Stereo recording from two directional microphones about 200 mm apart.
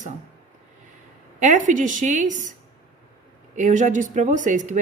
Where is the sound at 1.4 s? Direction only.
40° right (ahead or behind).